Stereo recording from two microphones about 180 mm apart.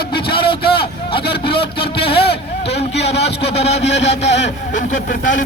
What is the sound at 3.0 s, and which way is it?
Speech, 70° left (ahead or behind).